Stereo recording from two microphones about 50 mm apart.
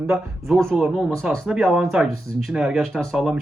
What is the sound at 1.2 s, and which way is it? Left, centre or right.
Speech, centre.